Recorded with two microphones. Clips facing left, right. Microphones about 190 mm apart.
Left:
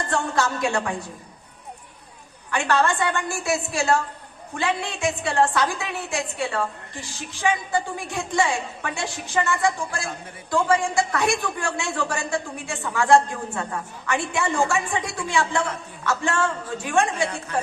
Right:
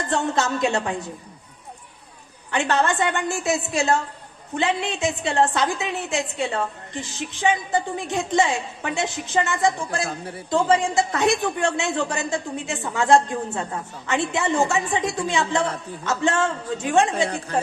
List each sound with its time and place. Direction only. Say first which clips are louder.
0.1 s a woman's voice: right 2 dB; 20° right (ahead or behind)
2.5 s a woman's voice: even; 20° right (ahead or behind)
10.1 s a woman's voice: right 4 dB; 35° right (ahead or behind)
10.5 s a woman's voice: right 1 dB; 20° right (ahead or behind)
17.2 s a woman's voice: right 3 dB; 35° right (ahead or behind)